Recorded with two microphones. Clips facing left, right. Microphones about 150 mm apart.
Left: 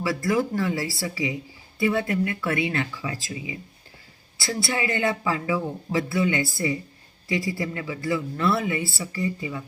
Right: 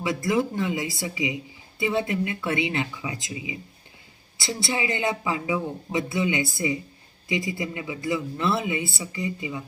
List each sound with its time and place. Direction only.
0.0 s speech: 20° right (ahead or behind)